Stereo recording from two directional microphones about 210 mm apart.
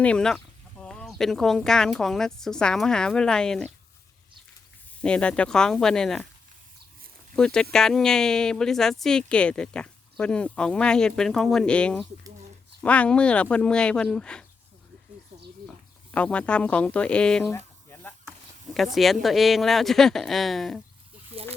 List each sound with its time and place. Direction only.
0.0 s speech: 5° left (ahead or behind)
4.9 s speech: 5° left (ahead or behind)
7.3 s speech: 5° left (ahead or behind)
16.1 s speech: 5° left (ahead or behind)
17.5 s a sound: 10° left (ahead or behind)
18.3 s speech: centre (ahead or behind)
21.3 s a sound: 25° right (ahead or behind)